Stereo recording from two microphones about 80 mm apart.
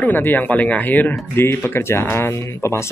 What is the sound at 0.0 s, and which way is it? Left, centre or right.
Speech, left.